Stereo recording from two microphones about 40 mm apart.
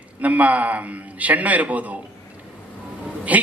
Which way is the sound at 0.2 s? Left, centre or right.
Right.